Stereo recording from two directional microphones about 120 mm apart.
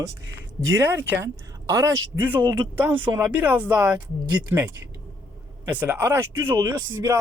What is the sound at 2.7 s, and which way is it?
Speech, 15° right (ahead or behind).